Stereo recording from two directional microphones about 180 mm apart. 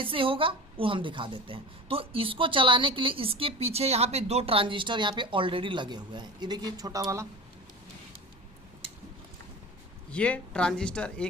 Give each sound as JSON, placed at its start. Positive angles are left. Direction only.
{"t": 0.0, "sound": "speech", "side_deg": -30}
{"t": 10.1, "sound": "speech", "side_deg": 5}